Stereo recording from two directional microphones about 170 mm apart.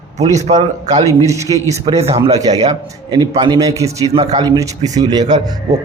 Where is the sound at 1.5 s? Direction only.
30° right (ahead or behind).